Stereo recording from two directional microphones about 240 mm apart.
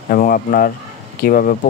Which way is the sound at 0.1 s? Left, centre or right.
Left.